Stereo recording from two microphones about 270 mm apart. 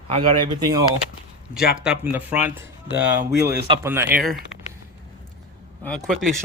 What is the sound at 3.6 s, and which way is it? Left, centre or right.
Speech, centre.